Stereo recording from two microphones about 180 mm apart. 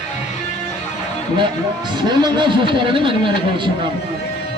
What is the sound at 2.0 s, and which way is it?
Speech, 25° right (ahead or behind).